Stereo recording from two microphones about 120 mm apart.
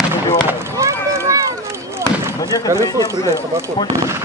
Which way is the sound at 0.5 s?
25° right (ahead or behind).